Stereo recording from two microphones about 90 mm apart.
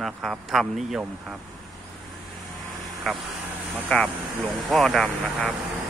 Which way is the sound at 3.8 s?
15° left (ahead or behind).